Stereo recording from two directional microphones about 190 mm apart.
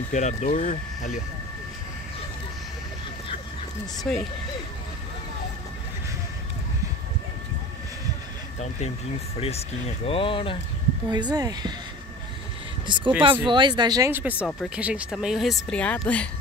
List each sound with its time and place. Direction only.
0.1 s speech: 40° left (ahead or behind)
4.1 s speech: 5° left (ahead or behind)
9.4 s speech: 30° left (ahead or behind)
11.1 s speech: 20° right (ahead or behind)
12.8 s speech: 25° right (ahead or behind); by 16.3 s 5° left (ahead or behind)